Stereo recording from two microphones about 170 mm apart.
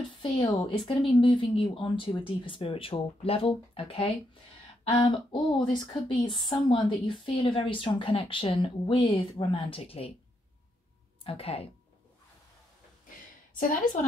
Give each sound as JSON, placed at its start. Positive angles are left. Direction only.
{"t": 0.2, "sound": "speech", "side_deg": 25}
{"t": 11.2, "sound": "speech", "side_deg": 35}